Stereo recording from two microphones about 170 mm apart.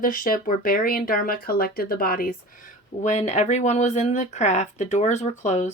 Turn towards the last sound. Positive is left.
turn(degrees=45)  # may be behind; listen again after turning